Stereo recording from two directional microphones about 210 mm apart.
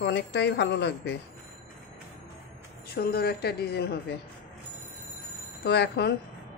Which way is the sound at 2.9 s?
50° left (ahead or behind).